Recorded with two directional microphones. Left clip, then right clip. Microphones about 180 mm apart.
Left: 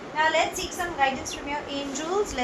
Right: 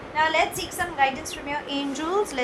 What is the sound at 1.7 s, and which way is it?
Speech, 30° right (ahead or behind).